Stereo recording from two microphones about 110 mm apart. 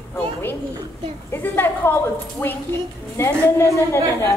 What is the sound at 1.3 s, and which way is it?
A woman's voice, 20° left (ahead or behind).